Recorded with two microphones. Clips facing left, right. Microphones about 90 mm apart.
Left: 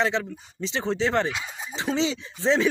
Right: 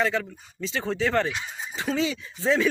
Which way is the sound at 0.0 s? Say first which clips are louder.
Left 1 dB; 25° left (ahead or behind).